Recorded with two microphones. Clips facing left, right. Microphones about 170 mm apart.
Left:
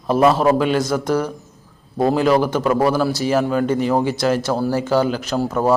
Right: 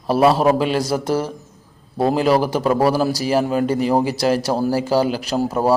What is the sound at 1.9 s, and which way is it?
Speech, 5° right (ahead or behind).